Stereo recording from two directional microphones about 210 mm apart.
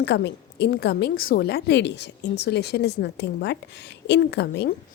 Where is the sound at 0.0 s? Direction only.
55° left (ahead or behind).